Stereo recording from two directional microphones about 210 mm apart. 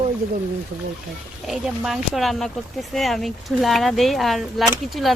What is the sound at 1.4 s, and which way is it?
Speech, 5° right (ahead or behind).